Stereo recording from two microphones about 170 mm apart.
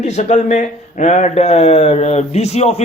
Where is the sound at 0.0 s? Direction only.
40° left (ahead or behind).